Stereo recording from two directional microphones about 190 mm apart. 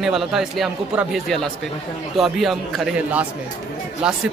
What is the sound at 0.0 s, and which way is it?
Speech, centre (ahead or behind).